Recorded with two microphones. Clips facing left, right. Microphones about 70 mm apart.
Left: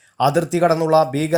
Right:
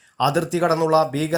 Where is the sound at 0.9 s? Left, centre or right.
Left.